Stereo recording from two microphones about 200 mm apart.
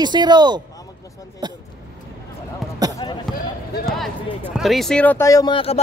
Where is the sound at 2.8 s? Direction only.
20° right (ahead or behind).